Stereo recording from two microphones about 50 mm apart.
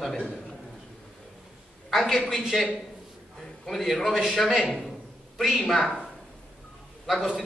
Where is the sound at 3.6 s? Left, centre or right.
Centre.